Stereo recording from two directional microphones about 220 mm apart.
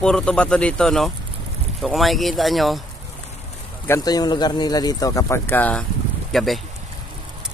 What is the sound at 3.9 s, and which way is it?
Speech, 15° left (ahead or behind).